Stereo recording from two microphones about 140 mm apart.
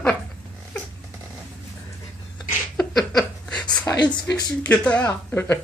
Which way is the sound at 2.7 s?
Centre (ahead or behind).